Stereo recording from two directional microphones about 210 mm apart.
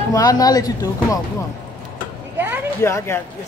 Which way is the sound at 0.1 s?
15° left (ahead or behind).